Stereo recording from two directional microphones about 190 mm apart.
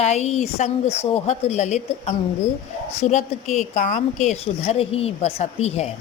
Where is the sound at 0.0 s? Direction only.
35° left (ahead or behind).